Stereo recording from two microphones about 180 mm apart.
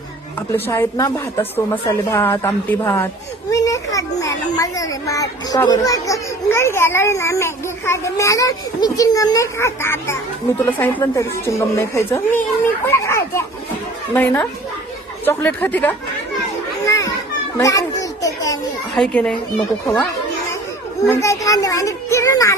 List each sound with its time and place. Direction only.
0.5 s a child's voice: 15° left (ahead or behind)
16.8 s children playing: 15° left (ahead or behind)
18.9 s a child's voice: 5° left (ahead or behind)
21.1 s a child's voice: 15° left (ahead or behind)